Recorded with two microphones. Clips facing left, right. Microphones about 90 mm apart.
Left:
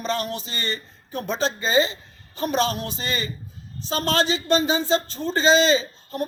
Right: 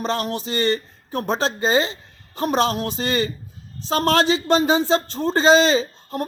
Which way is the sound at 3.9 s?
60° right (ahead or behind).